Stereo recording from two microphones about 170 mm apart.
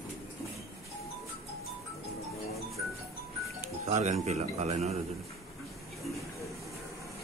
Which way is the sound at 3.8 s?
45° right (ahead or behind).